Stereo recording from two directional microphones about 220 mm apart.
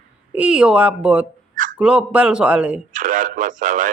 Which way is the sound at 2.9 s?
35° right (ahead or behind).